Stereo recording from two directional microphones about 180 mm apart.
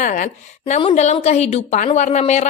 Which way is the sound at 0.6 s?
30° left (ahead or behind).